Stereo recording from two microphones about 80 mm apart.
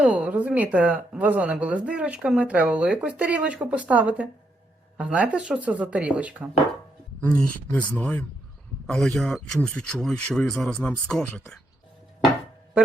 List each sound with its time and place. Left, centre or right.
0.0 s speech: centre
7.2 s speech: left
9.0 s speech: centre